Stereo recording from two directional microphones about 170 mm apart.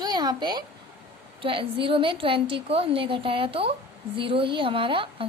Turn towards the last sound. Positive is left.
turn(degrees=-30)  # may be behind; listen again after turning